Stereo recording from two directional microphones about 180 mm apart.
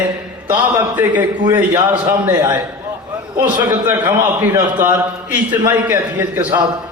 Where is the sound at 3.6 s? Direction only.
15° right (ahead or behind).